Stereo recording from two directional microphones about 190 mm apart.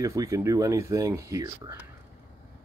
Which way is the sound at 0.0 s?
15° right (ahead or behind).